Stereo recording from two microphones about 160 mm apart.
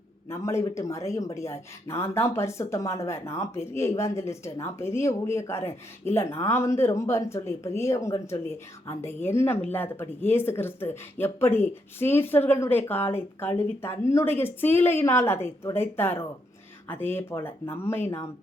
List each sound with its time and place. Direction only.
0.3 s speech: 15° left (ahead or behind)